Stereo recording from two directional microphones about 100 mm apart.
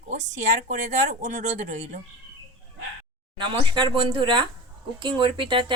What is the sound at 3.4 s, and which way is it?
A woman's voice, 50° right (ahead or behind).